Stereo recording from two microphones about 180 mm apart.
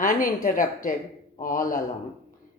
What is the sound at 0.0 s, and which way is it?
Speech, 45° left (ahead or behind).